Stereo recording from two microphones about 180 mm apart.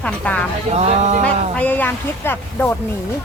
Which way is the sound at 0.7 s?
40° right (ahead or behind).